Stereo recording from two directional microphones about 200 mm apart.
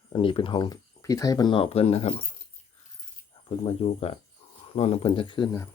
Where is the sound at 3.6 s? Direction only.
30° left (ahead or behind).